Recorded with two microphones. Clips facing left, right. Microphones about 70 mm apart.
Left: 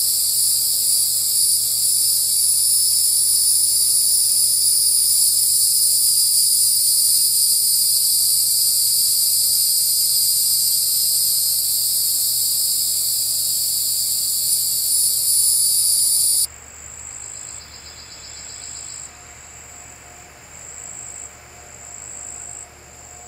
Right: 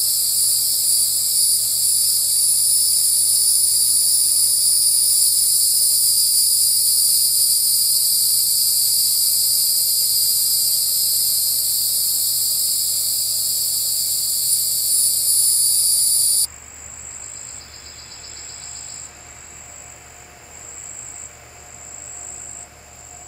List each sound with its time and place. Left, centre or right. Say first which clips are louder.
0.0 s hum: even; right